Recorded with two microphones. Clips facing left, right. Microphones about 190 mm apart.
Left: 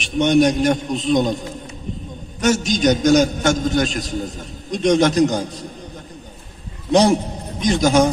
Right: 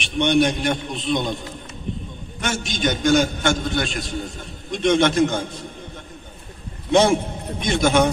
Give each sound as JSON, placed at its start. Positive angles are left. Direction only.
{"t": 0.0, "sound": "a man's voice", "side_deg": 40}
{"t": 6.9, "sound": "a man's voice", "side_deg": 40}